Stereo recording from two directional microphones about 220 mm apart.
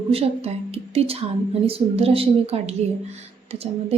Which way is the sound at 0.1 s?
25° right (ahead or behind).